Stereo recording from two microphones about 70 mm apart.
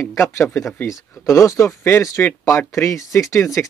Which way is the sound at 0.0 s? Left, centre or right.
Left.